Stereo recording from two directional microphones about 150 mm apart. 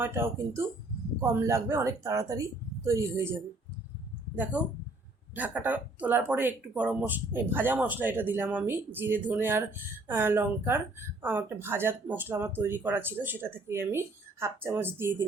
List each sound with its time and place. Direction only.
0.0 s speech: 15° right (ahead or behind)
5.3 s speech: 10° right (ahead or behind)